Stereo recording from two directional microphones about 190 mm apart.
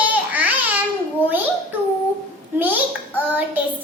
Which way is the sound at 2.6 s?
10° right (ahead or behind).